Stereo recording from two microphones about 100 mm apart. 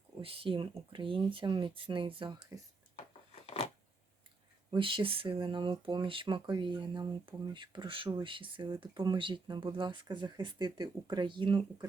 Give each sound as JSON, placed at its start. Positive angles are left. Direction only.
{"t": 0.2, "sound": "speech", "side_deg": -65}
{"t": 2.9, "sound": "a sound", "side_deg": 85}
{"t": 4.7, "sound": "speech", "side_deg": -55}